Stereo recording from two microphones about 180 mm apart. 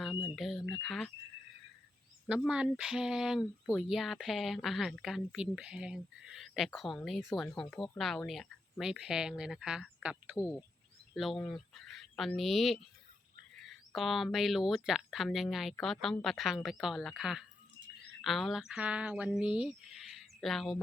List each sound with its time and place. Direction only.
0.3 s a sound: centre (ahead or behind)
0.7 s speech: centre (ahead or behind)
2.2 s speech: 5° right (ahead or behind)
10.3 s speech: 15° left (ahead or behind)
11.1 s speech: centre (ahead or behind)